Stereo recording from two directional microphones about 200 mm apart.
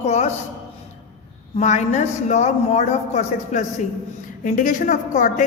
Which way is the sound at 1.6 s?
35° left (ahead or behind).